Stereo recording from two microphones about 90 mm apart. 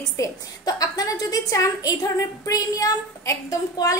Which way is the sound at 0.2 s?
45° left (ahead or behind).